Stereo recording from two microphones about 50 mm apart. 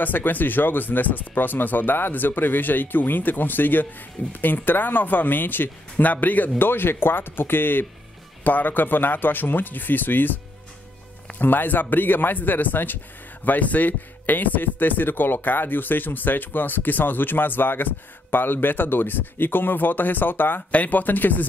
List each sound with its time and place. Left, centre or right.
0.0 s speech: left
6.6 s speech: left
11.3 s speech: left